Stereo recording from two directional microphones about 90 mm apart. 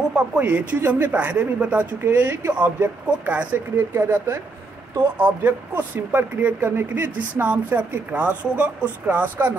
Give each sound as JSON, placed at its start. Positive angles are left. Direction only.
{"t": 0.1, "sound": "speech", "side_deg": -15}